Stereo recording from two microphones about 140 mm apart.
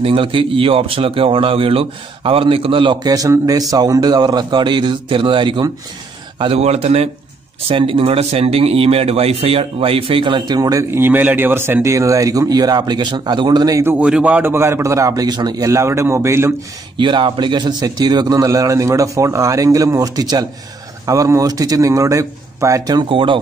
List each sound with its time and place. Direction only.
0.0 s speech: 40° right (ahead or behind)
6.4 s a man's voice: 45° right (ahead or behind); by 13.9 s 25° right (ahead or behind)
13.9 s a man's voice: 10° right (ahead or behind)
16.9 s a man's voice: 35° right (ahead or behind)
23.0 s speech: 40° right (ahead or behind)